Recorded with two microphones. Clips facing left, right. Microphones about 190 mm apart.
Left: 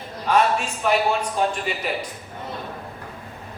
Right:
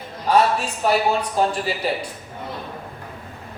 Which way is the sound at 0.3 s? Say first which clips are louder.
Right 2 dB; 35° right (ahead or behind).